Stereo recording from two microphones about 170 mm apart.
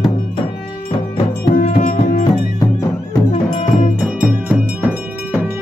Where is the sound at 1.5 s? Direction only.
55° left (ahead or behind).